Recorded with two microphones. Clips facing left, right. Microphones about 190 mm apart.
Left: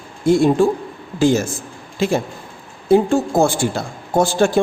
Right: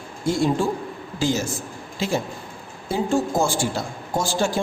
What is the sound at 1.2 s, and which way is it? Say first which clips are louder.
Speech: left 8 dB; 55° left (ahead or behind).